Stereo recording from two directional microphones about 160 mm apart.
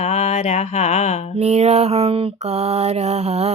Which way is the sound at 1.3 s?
40° right (ahead or behind).